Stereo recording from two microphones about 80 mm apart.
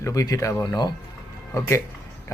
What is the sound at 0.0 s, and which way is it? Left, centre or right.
Speech, left.